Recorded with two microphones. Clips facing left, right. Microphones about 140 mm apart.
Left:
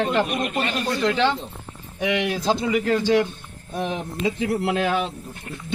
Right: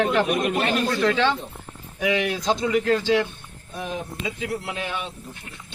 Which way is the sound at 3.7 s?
65° left (ahead or behind).